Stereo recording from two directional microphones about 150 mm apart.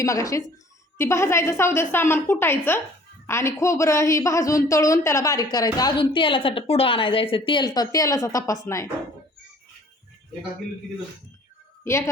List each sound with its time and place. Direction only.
0.0 s a woman's voice: 20° left (ahead or behind)